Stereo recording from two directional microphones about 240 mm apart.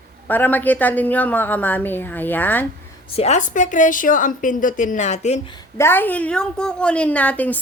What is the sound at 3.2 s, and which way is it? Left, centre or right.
A woman's voice, left.